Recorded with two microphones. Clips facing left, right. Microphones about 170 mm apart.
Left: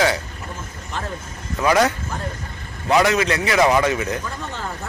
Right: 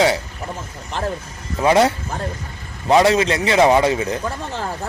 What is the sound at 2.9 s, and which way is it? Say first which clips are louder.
A man's voice: right 3 dB; 30° right (ahead or behind).